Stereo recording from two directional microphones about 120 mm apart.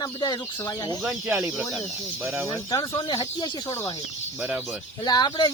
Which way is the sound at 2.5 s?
30° left (ahead or behind).